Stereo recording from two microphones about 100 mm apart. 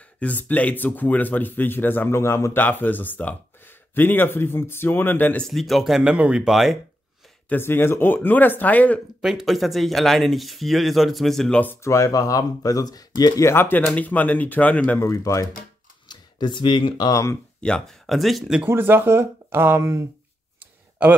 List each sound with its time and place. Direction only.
0.2 s speech: 15° left (ahead or behind)
5.4 s speech: centre (ahead or behind)
7.4 s speech: 20° left (ahead or behind)
9.2 s speech: 5° right (ahead or behind)
11.6 s speech: 25° left (ahead or behind)
13.5 s speech: 20° left (ahead or behind)
15.0 s speech: 30° left (ahead or behind)
16.1 s speech: 50° left (ahead or behind)
17.1 s speech: 30° left (ahead or behind)
17.6 s speech: 10° left (ahead or behind)
18.6 s speech: 25° right (ahead or behind)